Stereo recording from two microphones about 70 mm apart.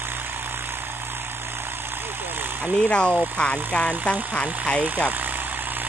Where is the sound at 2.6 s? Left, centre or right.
Centre.